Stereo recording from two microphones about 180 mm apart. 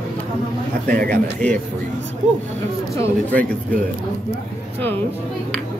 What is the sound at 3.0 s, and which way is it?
Speech, 10° left (ahead or behind).